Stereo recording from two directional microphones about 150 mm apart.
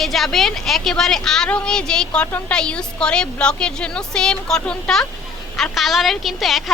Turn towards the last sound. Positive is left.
turn(degrees=0)  # may be behind; listen again after turning